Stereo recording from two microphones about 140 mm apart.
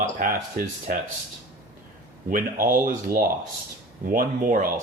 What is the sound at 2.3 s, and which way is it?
Speech, 90° right.